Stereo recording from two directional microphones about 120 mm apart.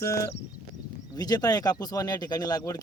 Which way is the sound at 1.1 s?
35° left (ahead or behind).